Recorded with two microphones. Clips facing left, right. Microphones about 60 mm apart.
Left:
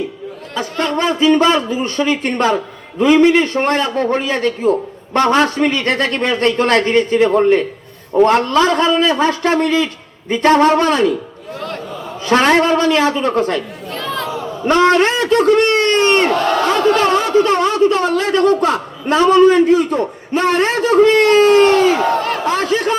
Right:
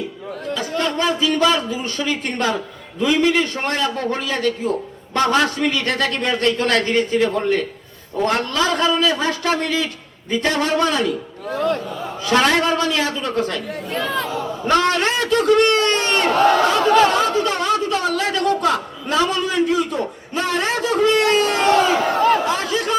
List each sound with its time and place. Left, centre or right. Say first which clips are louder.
0.5 s a man's voice: left 3 dB; left
12.2 s a man's voice: left 4 dB; left
14.7 s a man's voice: left 6 dB; left